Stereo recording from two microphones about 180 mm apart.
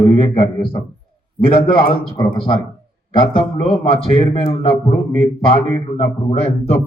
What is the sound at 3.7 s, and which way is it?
Speech, 30° left (ahead or behind).